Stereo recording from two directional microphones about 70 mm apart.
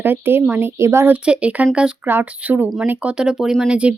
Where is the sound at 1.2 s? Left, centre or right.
Centre.